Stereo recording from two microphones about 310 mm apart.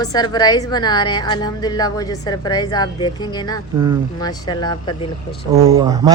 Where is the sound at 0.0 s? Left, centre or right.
Centre.